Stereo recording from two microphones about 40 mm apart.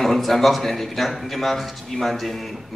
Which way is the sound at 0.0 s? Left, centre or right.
Centre.